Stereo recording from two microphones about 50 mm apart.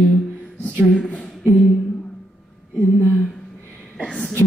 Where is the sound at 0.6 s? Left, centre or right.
Left.